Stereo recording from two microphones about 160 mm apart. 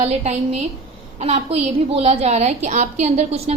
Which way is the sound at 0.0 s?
45° right (ahead or behind).